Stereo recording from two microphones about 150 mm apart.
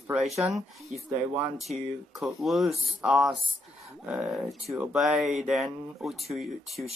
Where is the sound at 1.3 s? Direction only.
5° right (ahead or behind).